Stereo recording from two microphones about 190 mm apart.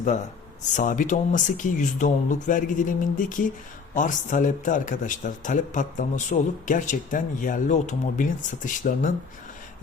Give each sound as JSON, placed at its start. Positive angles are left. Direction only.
{"t": 0.7, "sound": "speech", "side_deg": 45}